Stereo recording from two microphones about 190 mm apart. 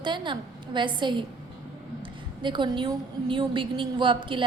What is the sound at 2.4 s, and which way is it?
A woman's voice, 25° right (ahead or behind).